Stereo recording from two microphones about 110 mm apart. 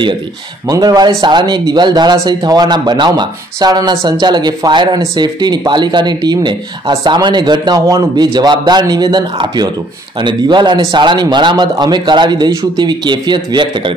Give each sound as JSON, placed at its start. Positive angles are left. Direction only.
{"t": 0.7, "sound": "speech", "side_deg": -35}